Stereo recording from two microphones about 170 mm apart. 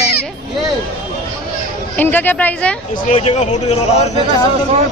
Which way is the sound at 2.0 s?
10° left (ahead or behind).